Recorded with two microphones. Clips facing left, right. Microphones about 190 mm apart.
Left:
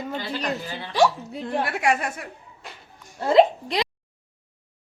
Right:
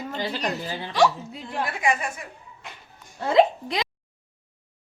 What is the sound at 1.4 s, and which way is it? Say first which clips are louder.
Speech: left 3 dB; 70° left (ahead or behind).